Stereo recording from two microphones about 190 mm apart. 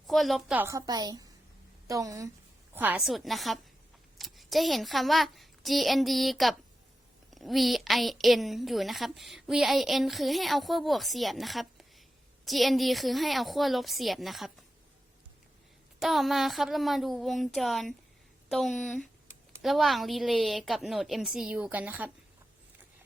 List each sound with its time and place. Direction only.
0.1 s a woman's voice: centre (ahead or behind)
16.0 s a woman's voice: centre (ahead or behind)